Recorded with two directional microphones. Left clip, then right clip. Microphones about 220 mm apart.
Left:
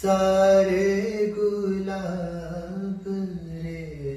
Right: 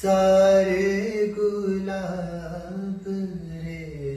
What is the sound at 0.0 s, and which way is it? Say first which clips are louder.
Mantra: right 2 dB; centre (ahead or behind).